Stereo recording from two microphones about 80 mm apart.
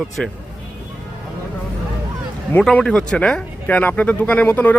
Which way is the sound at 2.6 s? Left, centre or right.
Centre.